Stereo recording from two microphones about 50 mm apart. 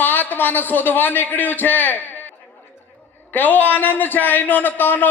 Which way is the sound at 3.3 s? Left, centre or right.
Left.